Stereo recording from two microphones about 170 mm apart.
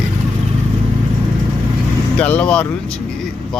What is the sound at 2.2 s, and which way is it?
Speech, 10° left (ahead or behind).